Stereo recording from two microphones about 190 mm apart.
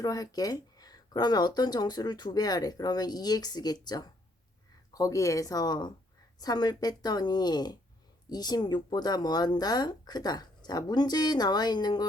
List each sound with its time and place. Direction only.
0.0 s speech: 20° left (ahead or behind)